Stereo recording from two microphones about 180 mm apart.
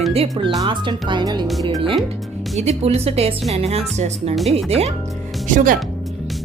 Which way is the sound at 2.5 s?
35° right (ahead or behind).